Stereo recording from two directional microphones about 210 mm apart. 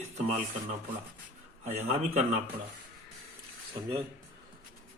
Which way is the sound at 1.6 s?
35° right (ahead or behind).